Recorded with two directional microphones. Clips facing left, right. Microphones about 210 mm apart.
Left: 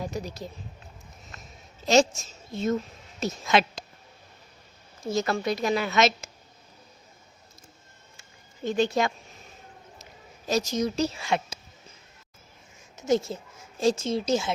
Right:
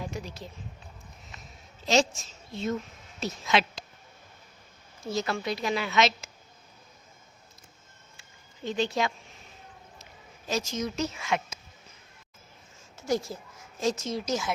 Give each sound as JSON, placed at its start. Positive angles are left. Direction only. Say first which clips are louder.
{"t": 0.0, "sound": "a sound", "louder": "left 4 dB", "side_deg": 40}
{"t": 1.9, "sound": "a woman's voice", "louder": "left 4 dB", "side_deg": 45}
{"t": 5.1, "sound": "a woman's voice", "louder": "left 4 dB", "side_deg": 45}
{"t": 8.6, "sound": "a woman's voice", "louder": "left 4 dB", "side_deg": 45}
{"t": 13.0, "sound": "a woman's voice", "louder": "left 4 dB", "side_deg": 20}